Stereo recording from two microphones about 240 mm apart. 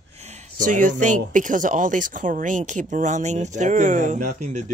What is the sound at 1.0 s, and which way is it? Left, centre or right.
Speech, right.